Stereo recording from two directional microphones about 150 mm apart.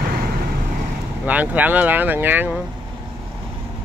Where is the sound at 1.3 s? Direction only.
10° right (ahead or behind).